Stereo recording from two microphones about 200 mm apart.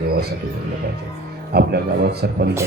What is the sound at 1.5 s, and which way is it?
Speech, 50° right (ahead or behind).